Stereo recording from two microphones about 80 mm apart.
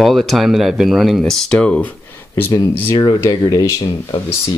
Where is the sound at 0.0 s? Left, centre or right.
Centre; by 2.5 s left.